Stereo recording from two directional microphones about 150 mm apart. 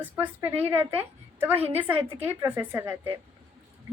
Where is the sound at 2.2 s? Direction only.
15° right (ahead or behind).